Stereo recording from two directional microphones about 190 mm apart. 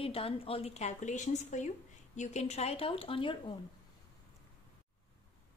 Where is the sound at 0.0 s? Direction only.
30° left (ahead or behind).